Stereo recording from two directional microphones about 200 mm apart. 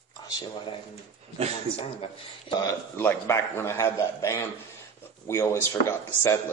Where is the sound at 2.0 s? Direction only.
20° left (ahead or behind).